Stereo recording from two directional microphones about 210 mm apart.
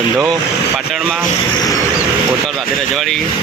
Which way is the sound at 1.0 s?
Centre (ahead or behind).